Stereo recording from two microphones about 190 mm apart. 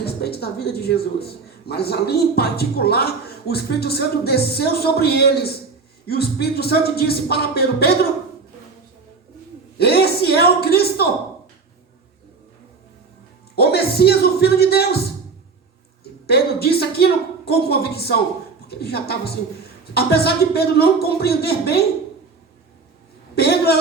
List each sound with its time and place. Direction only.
0.0 s speech: 55° left (ahead or behind)
9.7 s a woman's voice: 55° left (ahead or behind)
13.6 s speech: 55° left (ahead or behind)
16.2 s speech: 55° left (ahead or behind)
23.3 s a woman's voice: 55° left (ahead or behind)